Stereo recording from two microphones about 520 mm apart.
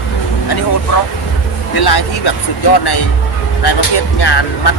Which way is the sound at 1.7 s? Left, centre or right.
Left.